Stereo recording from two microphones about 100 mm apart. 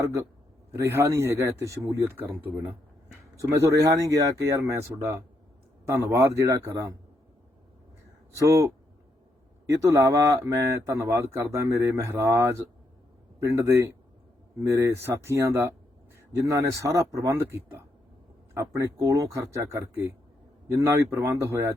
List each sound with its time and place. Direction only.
0.0 s speech: 30° right (ahead or behind)
2.4 s speech: 20° right (ahead or behind)
3.5 s speech: 35° right (ahead or behind)
8.4 s speech: 30° right (ahead or behind)